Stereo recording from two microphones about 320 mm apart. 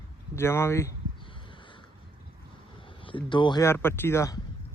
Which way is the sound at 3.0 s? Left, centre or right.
Centre.